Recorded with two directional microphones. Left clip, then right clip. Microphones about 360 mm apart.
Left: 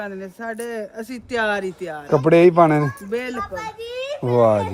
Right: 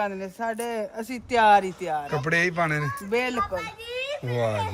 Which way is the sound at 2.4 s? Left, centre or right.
Left.